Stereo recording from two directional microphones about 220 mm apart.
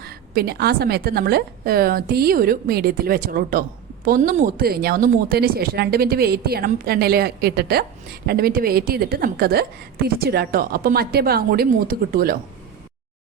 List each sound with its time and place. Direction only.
0.0 s speech: 45° right (ahead or behind)